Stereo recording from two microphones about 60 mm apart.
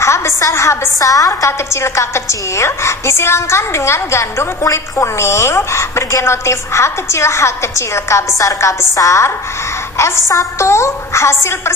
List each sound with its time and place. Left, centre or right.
0.0 s a woman's voice: left
1.4 s a woman's voice: left
8.4 s chopping: left
9.0 s a woman's voice: left